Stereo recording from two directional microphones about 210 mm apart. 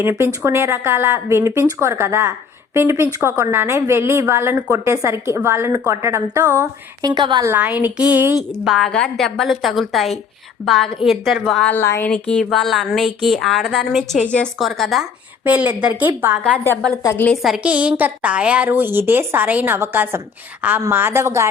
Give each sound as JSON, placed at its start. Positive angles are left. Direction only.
{"t": 0.0, "sound": "a woman's voice", "side_deg": -10}
{"t": 7.5, "sound": "a woman's voice", "side_deg": -10}
{"t": 8.6, "sound": "a woman's voice", "side_deg": 0}
{"t": 16.6, "sound": "a woman's voice", "side_deg": 15}